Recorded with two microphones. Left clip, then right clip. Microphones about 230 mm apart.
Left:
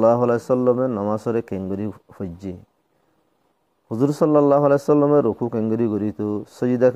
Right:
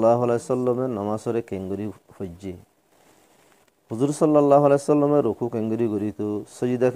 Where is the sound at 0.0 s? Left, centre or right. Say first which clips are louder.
Left 3 dB; left.